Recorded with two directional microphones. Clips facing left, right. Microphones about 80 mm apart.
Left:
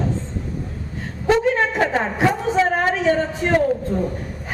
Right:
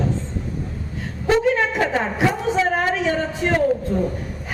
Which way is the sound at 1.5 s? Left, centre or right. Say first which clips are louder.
Left 1 dB; left.